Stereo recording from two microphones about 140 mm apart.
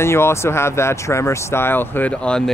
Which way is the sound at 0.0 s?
20° left (ahead or behind).